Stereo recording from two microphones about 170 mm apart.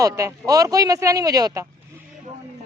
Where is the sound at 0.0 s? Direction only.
20° right (ahead or behind).